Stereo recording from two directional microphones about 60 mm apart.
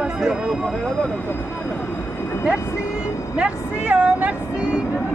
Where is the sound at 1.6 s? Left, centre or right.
Centre.